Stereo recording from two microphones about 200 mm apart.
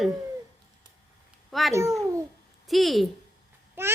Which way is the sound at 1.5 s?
Centre (ahead or behind).